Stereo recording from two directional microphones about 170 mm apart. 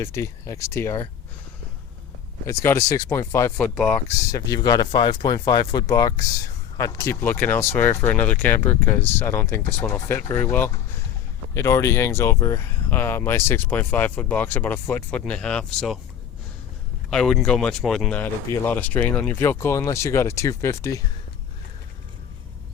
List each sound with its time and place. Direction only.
0.0 s speech: 15° left (ahead or behind)
2.5 s speech: 15° left (ahead or behind)
3.8 s speech: centre (ahead or behind)
4.3 s speech: 20° left (ahead or behind); by 16.0 s 5° left (ahead or behind)
17.1 s speech: 5° left (ahead or behind)